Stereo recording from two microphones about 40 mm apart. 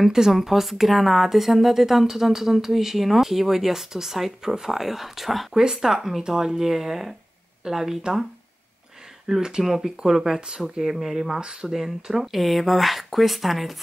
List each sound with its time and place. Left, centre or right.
0.0 s speech: centre
9.4 s speech: centre
11.3 s speech: centre
11.7 s speech: centre